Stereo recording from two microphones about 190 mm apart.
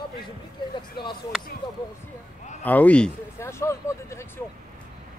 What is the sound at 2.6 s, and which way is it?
Speech, 10° left (ahead or behind).